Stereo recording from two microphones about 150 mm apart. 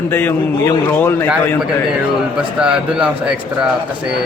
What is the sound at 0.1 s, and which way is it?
A man's voice, 15° left (ahead or behind).